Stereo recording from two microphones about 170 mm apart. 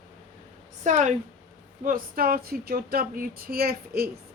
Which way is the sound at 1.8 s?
55° right (ahead or behind).